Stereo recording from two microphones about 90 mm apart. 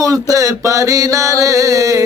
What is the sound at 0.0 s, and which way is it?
Mantra, 40° right (ahead or behind).